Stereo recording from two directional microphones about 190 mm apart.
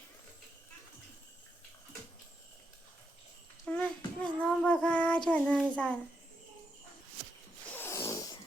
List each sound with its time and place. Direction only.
3.7 s child singing: 5° left (ahead or behind)
5.7 s a child's voice: 5° left (ahead or behind)
7.7 s zipper: 10° left (ahead or behind)